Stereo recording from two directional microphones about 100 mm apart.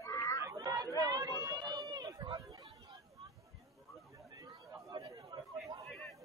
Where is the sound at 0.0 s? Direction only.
30° left (ahead or behind).